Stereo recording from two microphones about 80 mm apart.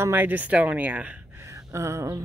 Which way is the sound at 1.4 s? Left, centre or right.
Right.